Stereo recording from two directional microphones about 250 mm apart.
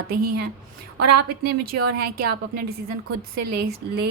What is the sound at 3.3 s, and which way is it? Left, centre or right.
Speech, right.